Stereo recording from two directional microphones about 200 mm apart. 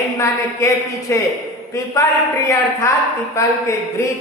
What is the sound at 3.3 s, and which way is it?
Speech, 15° left (ahead or behind).